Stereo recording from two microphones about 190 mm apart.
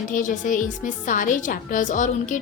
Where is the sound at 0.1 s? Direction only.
40° left (ahead or behind).